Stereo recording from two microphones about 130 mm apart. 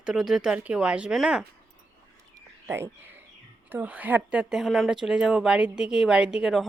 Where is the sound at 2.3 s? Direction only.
20° right (ahead or behind).